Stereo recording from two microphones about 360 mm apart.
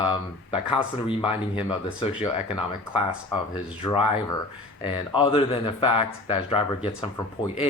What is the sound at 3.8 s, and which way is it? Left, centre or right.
Speech, centre.